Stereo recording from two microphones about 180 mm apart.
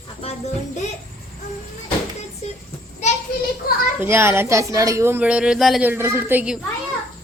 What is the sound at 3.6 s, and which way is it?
Speech, 55° left (ahead or behind).